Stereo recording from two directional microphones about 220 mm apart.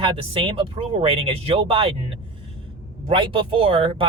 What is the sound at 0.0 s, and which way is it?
Speech, 25° right (ahead or behind).